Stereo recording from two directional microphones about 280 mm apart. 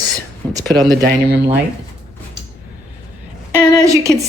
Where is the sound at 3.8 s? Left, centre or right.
Centre.